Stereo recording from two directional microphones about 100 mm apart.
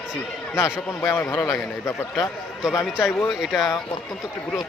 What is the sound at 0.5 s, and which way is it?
Speech, 25° left (ahead or behind).